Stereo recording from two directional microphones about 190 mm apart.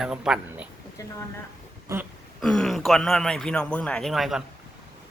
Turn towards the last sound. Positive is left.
turn(degrees=0)  # may be behind; listen again after turning